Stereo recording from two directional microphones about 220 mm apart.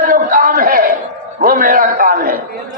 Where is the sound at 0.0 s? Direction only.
40° right (ahead or behind).